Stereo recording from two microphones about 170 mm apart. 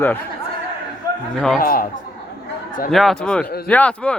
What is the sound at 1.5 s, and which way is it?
Speech, 60° left (ahead or behind).